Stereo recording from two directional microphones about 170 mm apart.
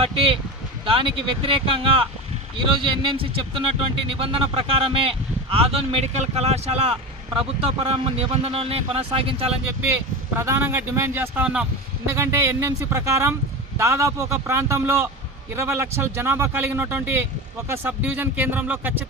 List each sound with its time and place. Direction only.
0.0 s speech: 35° right (ahead or behind)
10.3 s a man's voice: 15° right (ahead or behind)